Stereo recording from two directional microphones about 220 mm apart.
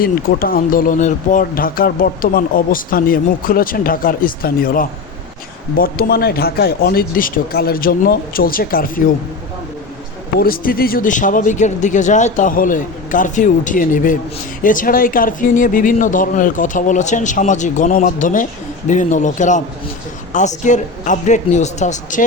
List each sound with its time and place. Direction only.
0.0 s speech: 40° left (ahead or behind)
10.4 s speech: 40° left (ahead or behind)